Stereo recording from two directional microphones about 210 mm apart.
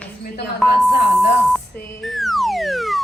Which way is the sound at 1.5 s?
Centre (ahead or behind).